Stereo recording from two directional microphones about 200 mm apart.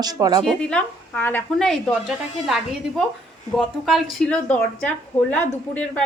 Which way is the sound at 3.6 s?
Centre (ahead or behind).